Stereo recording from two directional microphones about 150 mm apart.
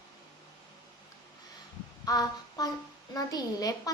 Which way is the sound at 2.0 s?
25° left (ahead or behind).